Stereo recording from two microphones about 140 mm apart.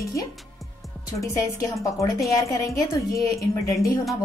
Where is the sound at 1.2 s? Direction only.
20° left (ahead or behind).